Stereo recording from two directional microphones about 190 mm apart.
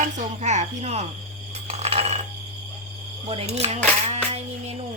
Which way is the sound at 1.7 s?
35° right (ahead or behind).